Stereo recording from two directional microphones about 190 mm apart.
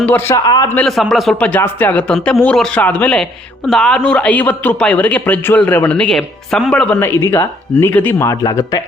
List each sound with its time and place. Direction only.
0.0 s a man's voice: 10° left (ahead or behind)
0.4 s a man's voice: 20° left (ahead or behind)
0.7 s a man's voice: 5° left (ahead or behind)